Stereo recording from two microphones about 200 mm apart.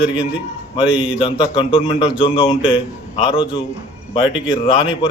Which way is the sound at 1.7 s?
30° left (ahead or behind).